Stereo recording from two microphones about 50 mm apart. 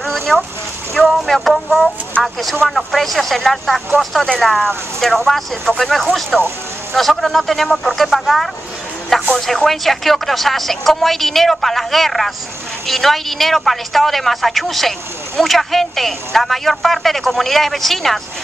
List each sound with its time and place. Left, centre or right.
0.0 s a sound: centre
1.0 s a woman's voice: centre
2.1 s speech: left
2.7 s a woman's voice: centre